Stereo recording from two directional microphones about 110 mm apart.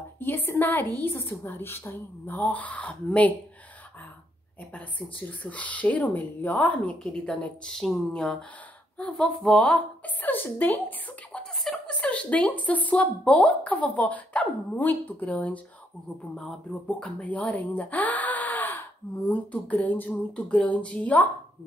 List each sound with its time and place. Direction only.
0.2 s a woman's voice: 20° left (ahead or behind)
4.7 s speech: 15° left (ahead or behind)
11.6 s a sound: centre (ahead or behind)
12.0 s speech: 10° left (ahead or behind)
17.0 s speech: 15° left (ahead or behind)